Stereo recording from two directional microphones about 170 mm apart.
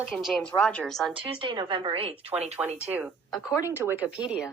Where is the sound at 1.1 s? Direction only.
30° right (ahead or behind).